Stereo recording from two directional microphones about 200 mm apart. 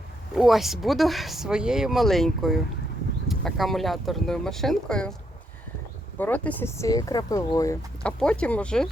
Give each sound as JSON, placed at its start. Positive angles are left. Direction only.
{"t": 0.3, "sound": "speech", "side_deg": 0}
{"t": 6.1, "sound": "speech", "side_deg": 10}
{"t": 8.0, "sound": "speech", "side_deg": 5}